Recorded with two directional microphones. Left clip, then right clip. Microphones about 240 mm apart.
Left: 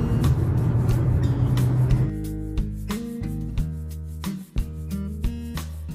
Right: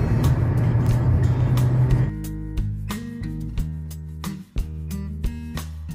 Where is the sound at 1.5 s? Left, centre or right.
Centre.